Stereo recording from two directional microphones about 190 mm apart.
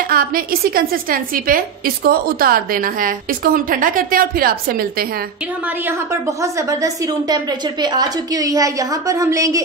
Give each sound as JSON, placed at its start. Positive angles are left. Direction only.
{"t": 0.1, "sound": "a woman's voice", "side_deg": -50}
{"t": 6.4, "sound": "a woman's voice", "side_deg": -15}